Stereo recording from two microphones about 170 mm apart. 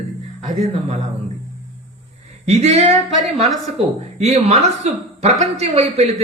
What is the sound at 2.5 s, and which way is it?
A man's voice, 40° right (ahead or behind).